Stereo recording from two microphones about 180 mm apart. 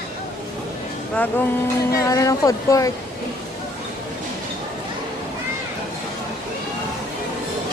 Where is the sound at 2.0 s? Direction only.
20° left (ahead or behind).